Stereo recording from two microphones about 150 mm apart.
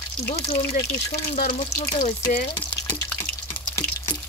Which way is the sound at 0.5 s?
90° left.